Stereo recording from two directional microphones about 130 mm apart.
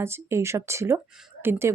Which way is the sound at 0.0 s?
20° right (ahead or behind).